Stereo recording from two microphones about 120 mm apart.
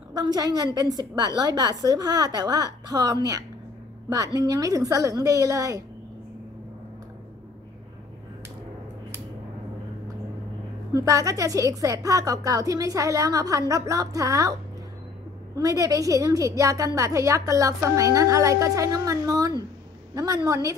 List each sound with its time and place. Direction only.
0.1 s a woman's voice: 35° right (ahead or behind)
10.9 s a woman's voice: 30° right (ahead or behind)
15.5 s a woman's voice: 30° right (ahead or behind)